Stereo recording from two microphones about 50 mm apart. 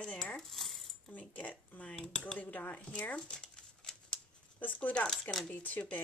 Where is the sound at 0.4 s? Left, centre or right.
Centre.